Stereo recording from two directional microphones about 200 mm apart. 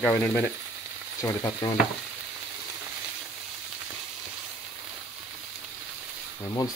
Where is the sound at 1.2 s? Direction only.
15° left (ahead or behind).